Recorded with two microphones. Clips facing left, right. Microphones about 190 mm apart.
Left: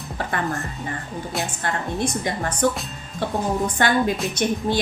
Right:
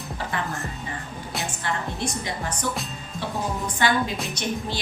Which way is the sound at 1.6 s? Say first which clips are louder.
Left 4 dB; 50° left (ahead or behind).